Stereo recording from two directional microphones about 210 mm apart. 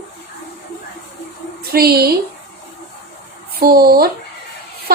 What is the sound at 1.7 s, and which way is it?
Speech, 50° right (ahead or behind).